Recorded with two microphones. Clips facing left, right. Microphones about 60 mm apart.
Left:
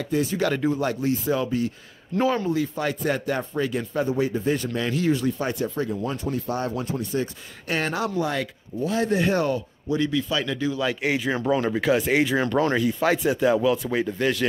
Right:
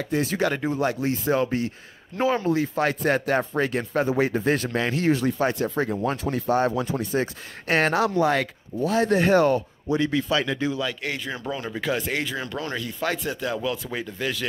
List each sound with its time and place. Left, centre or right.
0.4 s speech: centre
0.7 s speech: right
2.1 s speech: right
2.4 s speech: right
4.1 s speech: right
4.9 s speech: right
5.9 s speech: right
6.3 s speech: right
7.6 s speech: right
9.9 s speech: right
10.8 s speech: centre